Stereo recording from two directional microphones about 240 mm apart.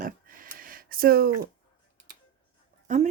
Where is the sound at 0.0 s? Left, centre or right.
Right.